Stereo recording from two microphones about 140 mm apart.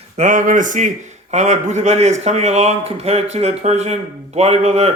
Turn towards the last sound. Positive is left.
turn(degrees=-50)  # may be behind; listen again after turning